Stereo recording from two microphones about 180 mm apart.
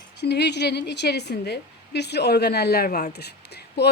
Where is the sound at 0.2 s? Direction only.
70° left (ahead or behind).